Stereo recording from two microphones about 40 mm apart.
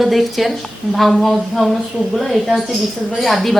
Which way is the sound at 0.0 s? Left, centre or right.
Centre.